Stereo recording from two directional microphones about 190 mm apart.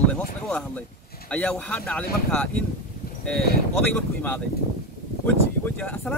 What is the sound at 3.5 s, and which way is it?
Speech, 55° left (ahead or behind).